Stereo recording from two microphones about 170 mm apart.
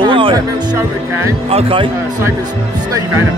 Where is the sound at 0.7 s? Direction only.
15° right (ahead or behind).